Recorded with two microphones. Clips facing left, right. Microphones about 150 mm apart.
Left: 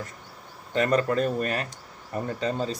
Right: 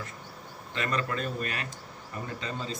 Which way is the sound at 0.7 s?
40° left (ahead or behind).